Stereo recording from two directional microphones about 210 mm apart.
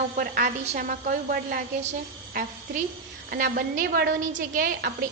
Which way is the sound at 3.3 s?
45° right (ahead or behind).